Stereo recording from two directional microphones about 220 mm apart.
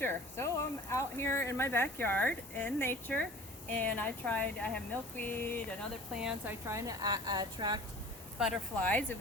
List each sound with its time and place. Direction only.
0.0 s speech: 10° left (ahead or behind)
6.1 s a woman's voice: 5° right (ahead or behind)
8.4 s speech: 5° left (ahead or behind)